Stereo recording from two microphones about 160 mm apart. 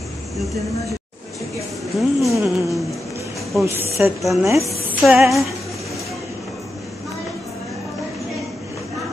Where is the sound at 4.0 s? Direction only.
10° right (ahead or behind).